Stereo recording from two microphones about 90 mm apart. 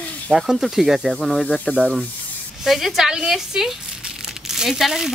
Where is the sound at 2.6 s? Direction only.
Centre (ahead or behind).